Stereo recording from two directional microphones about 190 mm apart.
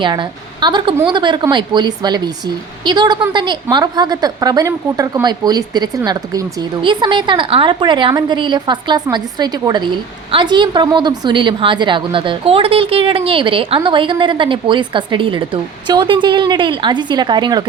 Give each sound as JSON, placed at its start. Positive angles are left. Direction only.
{"t": 0.0, "sound": "a woman's voice", "side_deg": -25}